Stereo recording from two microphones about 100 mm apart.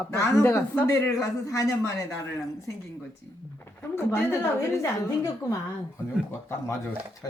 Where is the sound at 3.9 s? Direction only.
25° left (ahead or behind).